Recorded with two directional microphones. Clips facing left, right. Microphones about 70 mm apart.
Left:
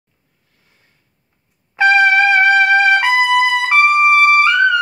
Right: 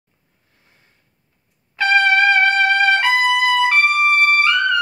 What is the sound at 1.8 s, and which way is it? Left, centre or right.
Trumpet, left.